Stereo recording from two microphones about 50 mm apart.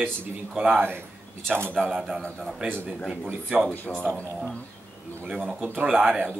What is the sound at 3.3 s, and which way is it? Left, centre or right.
Speech, right.